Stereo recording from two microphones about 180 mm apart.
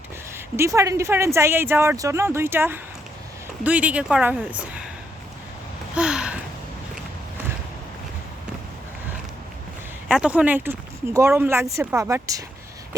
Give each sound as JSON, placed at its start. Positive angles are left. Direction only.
{"t": 0.3, "sound": "speech", "side_deg": -15}
{"t": 5.9, "sound": "a sound", "side_deg": -5}
{"t": 10.1, "sound": "speech", "side_deg": -5}